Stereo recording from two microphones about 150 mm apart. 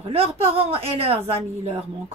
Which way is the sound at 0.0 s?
40° right (ahead or behind).